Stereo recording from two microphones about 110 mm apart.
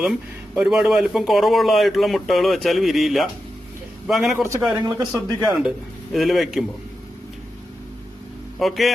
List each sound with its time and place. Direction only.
0.5 s speech: 5° right (ahead or behind)
4.8 s speech: 40° right (ahead or behind)
5.6 s speech: centre (ahead or behind)
8.5 s speech: centre (ahead or behind)